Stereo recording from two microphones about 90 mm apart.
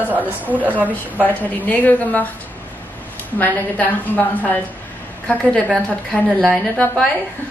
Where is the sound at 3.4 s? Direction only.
20° left (ahead or behind).